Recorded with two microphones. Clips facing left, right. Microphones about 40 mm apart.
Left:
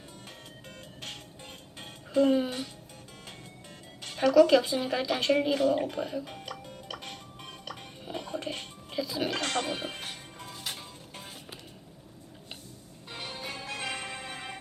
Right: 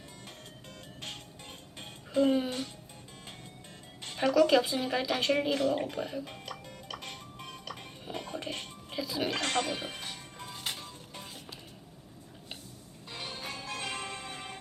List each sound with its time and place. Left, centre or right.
2.1 s speech: centre
4.3 s speech: centre
6.9 s music: centre
9.4 s music: right
9.6 s speech: left
10.8 s music: left
13.1 s music: left